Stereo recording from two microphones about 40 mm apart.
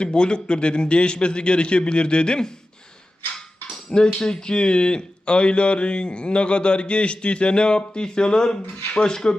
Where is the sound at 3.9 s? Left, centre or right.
Left.